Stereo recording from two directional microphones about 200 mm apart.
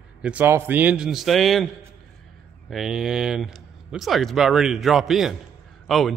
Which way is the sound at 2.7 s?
Centre (ahead or behind).